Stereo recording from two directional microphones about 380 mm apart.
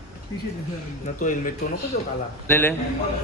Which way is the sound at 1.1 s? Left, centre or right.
Centre.